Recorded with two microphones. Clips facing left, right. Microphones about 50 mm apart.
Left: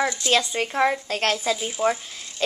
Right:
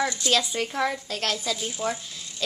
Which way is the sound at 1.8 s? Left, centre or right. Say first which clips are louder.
Left 6 dB; left.